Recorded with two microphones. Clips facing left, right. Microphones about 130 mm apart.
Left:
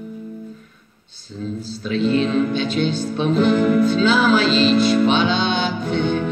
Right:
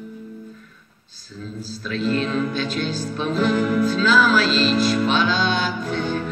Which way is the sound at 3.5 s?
25° left (ahead or behind).